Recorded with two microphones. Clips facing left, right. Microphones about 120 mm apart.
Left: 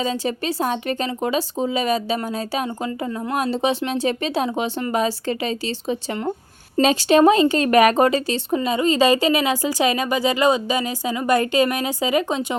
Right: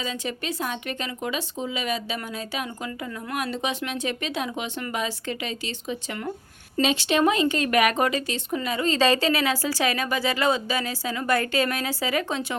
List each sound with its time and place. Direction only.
0.0 s speech: 35° left (ahead or behind); by 12.5 s 20° left (ahead or behind)